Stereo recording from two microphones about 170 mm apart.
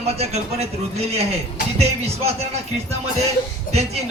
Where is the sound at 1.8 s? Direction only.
40° right (ahead or behind).